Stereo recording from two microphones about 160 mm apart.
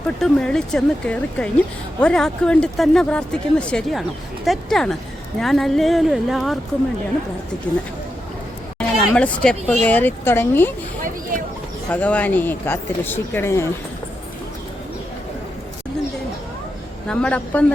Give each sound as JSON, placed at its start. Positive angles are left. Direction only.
{"t": 0.2, "sound": "speech", "side_deg": 5}
{"t": 7.7, "sound": "speech", "side_deg": 10}
{"t": 9.0, "sound": "speech", "side_deg": 5}
{"t": 11.0, "sound": "a sound", "side_deg": -55}
{"t": 11.9, "sound": "speech", "side_deg": 10}
{"t": 17.1, "sound": "speech", "side_deg": 5}